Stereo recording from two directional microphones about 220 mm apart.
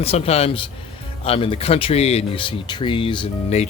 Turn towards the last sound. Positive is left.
turn(degrees=25)  # may be behind; listen again after turning